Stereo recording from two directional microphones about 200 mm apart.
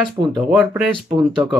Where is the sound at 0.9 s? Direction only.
25° right (ahead or behind).